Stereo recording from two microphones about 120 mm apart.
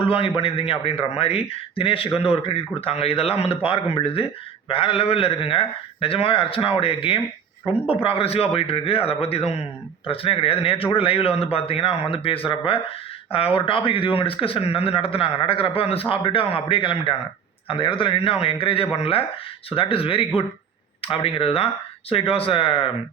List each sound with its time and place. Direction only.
0.0 s a man's voice: 50° left (ahead or behind)